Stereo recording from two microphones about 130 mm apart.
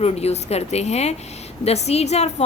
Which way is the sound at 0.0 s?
55° left (ahead or behind).